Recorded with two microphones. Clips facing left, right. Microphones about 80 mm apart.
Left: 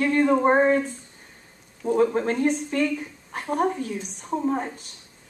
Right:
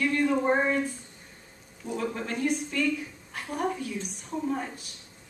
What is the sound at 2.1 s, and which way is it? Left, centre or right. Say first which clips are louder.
A woman's voice: left 6 dB; left.